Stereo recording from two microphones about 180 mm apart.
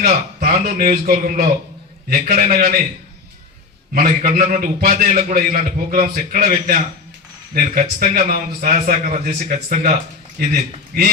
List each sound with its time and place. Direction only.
0.0 s a man's voice: 55° right (ahead or behind)
3.9 s a man's voice: 50° right (ahead or behind)